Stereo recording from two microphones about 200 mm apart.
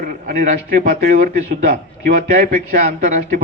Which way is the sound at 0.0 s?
45° right (ahead or behind).